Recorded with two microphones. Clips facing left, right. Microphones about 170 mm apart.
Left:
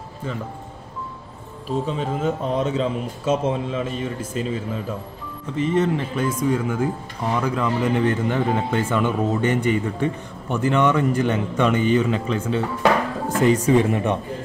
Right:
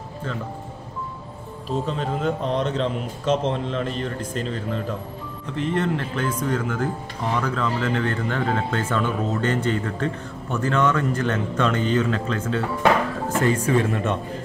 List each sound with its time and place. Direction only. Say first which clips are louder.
1.9 s speech: even; 5° left (ahead or behind)